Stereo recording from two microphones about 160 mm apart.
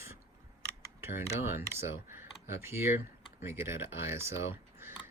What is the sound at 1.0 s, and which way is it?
Speech, 15° right (ahead or behind).